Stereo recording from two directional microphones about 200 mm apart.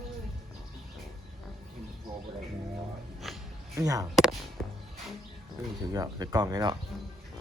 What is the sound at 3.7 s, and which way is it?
Speech, 15° right (ahead or behind).